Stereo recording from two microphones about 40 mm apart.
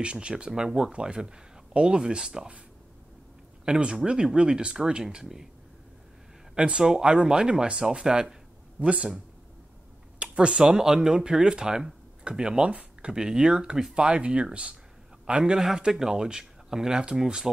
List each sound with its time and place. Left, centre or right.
0.0 s speech: right
3.6 s speech: right
6.5 s speech: right
13.9 s a man's voice: right
15.5 s speech: centre